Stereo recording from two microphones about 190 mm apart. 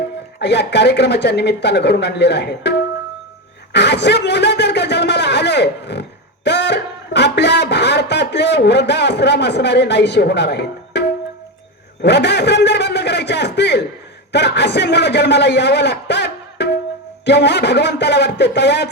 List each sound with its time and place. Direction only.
0.3 s speech: 60° left (ahead or behind)
12.0 s a man's voice: 65° left (ahead or behind)